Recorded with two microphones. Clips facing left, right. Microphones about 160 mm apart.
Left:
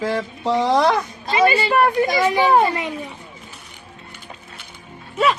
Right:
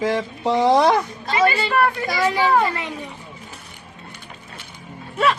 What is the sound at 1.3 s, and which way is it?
A woman's voice, 20° left (ahead or behind).